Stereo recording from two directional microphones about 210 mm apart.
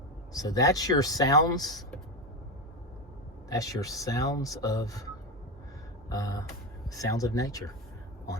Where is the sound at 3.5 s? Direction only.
15° left (ahead or behind).